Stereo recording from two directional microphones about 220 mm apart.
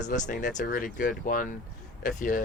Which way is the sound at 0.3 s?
35° left (ahead or behind).